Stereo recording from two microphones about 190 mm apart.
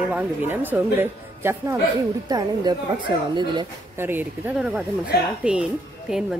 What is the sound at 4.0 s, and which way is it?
A woman's voice, 10° right (ahead or behind).